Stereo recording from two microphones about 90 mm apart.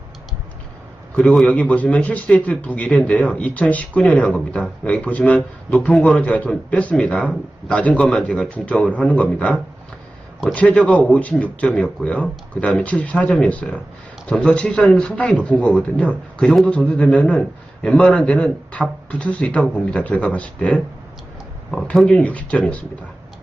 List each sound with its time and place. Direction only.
1.1 s a man's voice: 5° left (ahead or behind)
21.9 s a man's voice: 10° left (ahead or behind)